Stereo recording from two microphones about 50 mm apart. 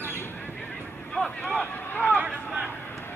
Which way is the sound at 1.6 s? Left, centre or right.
Left.